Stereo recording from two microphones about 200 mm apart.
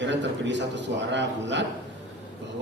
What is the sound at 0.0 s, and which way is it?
A man's voice, 65° right (ahead or behind).